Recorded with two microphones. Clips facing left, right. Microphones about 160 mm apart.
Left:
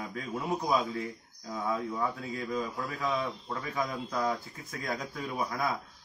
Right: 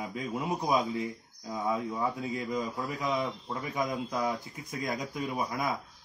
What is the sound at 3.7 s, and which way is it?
Speech, 15° right (ahead or behind).